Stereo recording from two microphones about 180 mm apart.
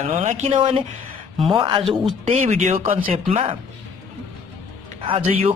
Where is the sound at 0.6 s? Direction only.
30° right (ahead or behind).